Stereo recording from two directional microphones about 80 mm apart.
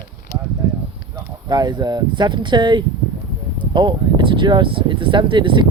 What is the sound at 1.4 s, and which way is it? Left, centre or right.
Speech, right.